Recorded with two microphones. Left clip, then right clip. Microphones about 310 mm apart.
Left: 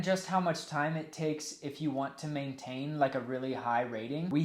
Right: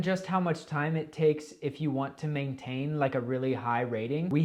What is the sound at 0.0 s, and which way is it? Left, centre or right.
Speech, right.